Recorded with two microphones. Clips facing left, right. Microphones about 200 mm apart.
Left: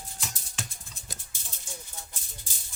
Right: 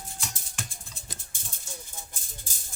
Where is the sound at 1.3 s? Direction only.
50° right (ahead or behind).